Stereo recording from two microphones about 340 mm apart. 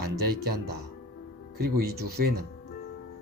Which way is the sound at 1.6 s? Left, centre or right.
Right.